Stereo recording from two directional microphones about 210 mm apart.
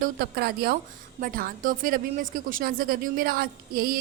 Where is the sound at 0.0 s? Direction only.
45° right (ahead or behind).